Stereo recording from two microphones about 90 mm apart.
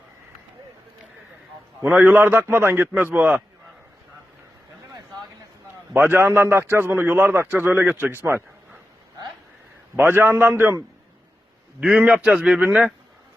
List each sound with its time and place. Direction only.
1.8 s a man's voice: 20° right (ahead or behind)
5.9 s a man's voice: 25° right (ahead or behind)
9.9 s a man's voice: 25° right (ahead or behind)
11.9 s a man's voice: 15° right (ahead or behind)